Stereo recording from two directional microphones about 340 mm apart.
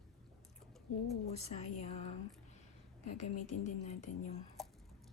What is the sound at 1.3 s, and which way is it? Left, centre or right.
Speech, centre.